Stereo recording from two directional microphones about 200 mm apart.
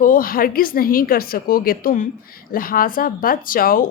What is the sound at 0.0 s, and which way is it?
Speech, 45° left (ahead or behind).